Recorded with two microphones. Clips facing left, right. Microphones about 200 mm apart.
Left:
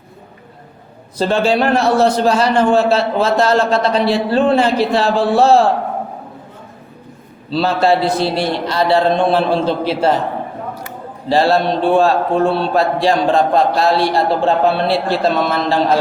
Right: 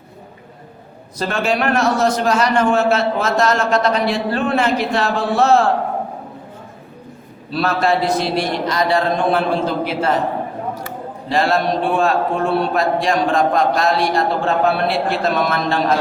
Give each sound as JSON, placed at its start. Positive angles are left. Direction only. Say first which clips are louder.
{"t": 1.2, "sound": "a man's voice", "louder": "left 5 dB", "side_deg": 30}
{"t": 7.5, "sound": "a man's voice", "louder": "left 3 dB", "side_deg": 30}
{"t": 11.3, "sound": "a man's voice", "louder": "left 4 dB", "side_deg": 30}